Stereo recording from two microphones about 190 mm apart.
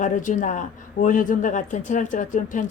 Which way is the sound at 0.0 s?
40° left (ahead or behind).